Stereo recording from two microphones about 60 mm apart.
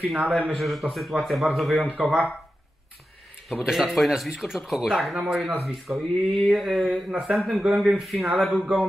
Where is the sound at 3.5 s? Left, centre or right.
Centre.